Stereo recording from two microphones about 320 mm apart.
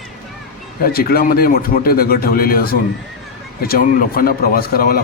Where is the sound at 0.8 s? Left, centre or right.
Left.